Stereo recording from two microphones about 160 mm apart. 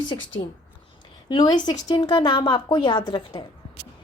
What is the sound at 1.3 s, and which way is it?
A woman's voice, 30° left (ahead or behind).